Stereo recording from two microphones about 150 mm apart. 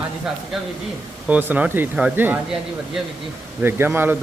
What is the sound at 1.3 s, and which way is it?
Speech, 10° right (ahead or behind).